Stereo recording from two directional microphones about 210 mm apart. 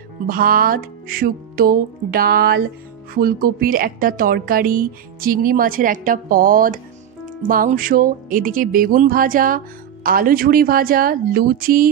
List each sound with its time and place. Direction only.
0.3 s a woman's voice: 45° right (ahead or behind)